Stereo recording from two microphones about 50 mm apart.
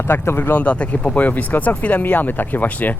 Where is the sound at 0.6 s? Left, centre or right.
Left.